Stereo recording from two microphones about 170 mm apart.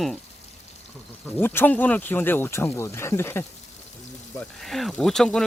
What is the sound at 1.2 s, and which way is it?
Speech, 10° left (ahead or behind).